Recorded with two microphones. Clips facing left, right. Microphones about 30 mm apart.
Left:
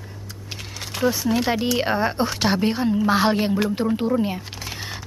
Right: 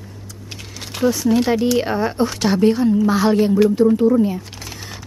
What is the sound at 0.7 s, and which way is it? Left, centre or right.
A woman's voice, centre.